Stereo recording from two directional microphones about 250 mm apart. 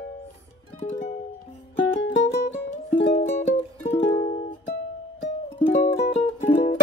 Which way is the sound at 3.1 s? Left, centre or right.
Left.